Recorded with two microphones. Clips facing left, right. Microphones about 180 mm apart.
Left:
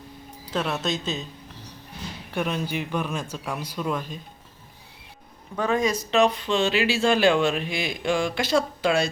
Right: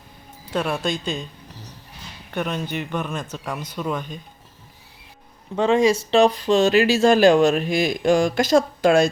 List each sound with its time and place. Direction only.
0.5 s speech: 10° right (ahead or behind)
0.8 s speech: 5° left (ahead or behind)
2.3 s speech: centre (ahead or behind)
5.5 s speech: 25° right (ahead or behind); by 9.0 s 45° right (ahead or behind)